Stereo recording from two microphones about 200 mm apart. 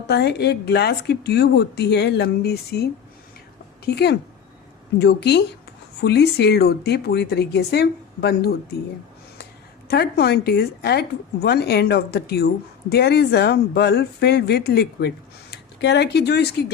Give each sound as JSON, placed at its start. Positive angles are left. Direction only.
{"t": 0.1, "sound": "speech", "side_deg": 55}
{"t": 3.9, "sound": "speech", "side_deg": 55}
{"t": 9.9, "sound": "speech", "side_deg": 55}